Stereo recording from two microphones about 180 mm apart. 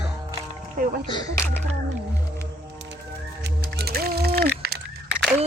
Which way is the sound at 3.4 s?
65° right (ahead or behind).